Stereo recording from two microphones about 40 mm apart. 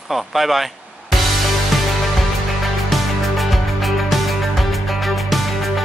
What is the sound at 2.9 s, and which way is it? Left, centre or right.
Music, centre.